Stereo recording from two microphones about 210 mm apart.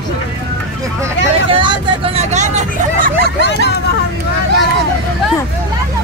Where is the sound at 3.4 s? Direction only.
55° left (ahead or behind).